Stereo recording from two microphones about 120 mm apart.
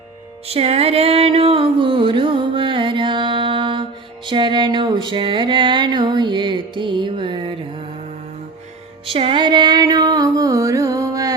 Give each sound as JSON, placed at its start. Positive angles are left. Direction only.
{"t": 0.4, "sound": "music", "side_deg": -55}
{"t": 9.0, "sound": "music", "side_deg": -50}